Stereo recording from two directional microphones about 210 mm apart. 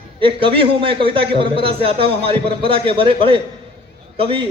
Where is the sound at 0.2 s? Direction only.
25° right (ahead or behind).